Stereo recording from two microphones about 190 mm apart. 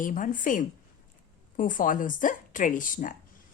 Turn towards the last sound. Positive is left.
turn(degrees=45)  # may be behind; listen again after turning